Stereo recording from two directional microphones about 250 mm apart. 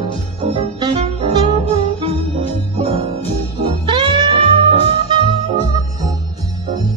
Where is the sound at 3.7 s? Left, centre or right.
Centre.